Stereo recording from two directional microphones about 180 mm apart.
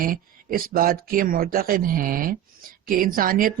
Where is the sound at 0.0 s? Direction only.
50° right (ahead or behind).